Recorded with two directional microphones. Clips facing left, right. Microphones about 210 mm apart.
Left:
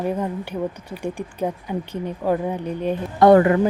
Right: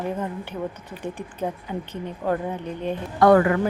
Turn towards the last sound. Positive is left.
turn(degrees=25)  # may be behind; listen again after turning